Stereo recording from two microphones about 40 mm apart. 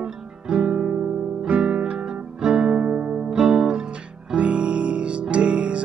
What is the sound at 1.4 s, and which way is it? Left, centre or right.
Music, right.